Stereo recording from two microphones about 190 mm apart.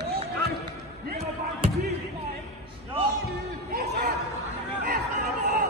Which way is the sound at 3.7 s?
60° right (ahead or behind).